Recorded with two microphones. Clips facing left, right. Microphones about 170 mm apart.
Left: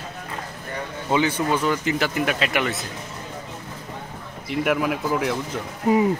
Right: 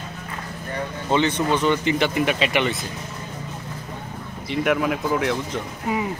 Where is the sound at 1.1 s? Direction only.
10° left (ahead or behind).